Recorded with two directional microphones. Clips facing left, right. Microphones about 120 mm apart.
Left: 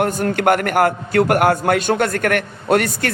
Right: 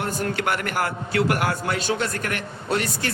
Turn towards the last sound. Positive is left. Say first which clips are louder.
# left 8 dB
turn(degrees=60)  # may be behind; listen again after turning